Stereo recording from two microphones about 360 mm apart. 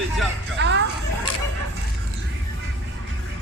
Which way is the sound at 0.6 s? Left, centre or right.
Right.